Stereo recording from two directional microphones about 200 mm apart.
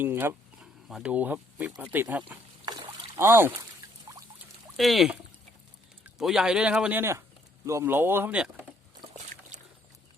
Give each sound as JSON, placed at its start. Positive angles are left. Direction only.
{"t": 0.0, "sound": "speech", "side_deg": -10}
{"t": 2.6, "sound": "boat", "side_deg": -25}
{"t": 3.2, "sound": "speech", "side_deg": -10}
{"t": 4.8, "sound": "a man's voice", "side_deg": 0}
{"t": 6.1, "sound": "a man's voice", "side_deg": 0}
{"t": 9.1, "sound": "boat", "side_deg": -35}